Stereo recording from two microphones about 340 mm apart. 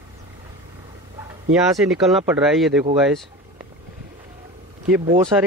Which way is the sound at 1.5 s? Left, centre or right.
Centre.